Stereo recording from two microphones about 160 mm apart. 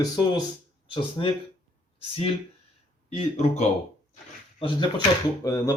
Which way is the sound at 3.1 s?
45° left (ahead or behind).